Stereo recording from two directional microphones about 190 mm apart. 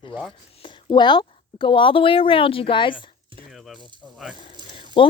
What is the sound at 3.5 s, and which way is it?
Rattle, centre (ahead or behind).